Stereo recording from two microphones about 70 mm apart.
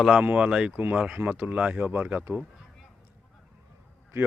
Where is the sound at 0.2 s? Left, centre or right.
Centre.